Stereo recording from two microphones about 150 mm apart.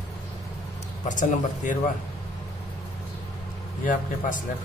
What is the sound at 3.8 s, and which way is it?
Speech, 60° left (ahead or behind).